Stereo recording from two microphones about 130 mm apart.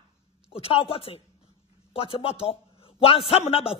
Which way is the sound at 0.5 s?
45° left (ahead or behind).